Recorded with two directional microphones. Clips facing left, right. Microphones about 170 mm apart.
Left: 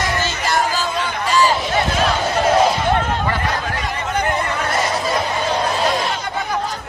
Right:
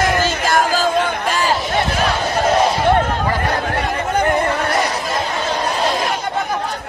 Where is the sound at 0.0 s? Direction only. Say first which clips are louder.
Right 4 dB; 50° right (ahead or behind).